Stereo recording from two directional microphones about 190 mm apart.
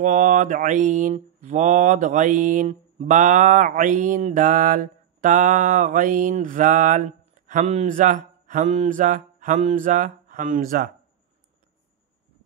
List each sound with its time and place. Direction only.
0.0 s mantra: 40° right (ahead or behind)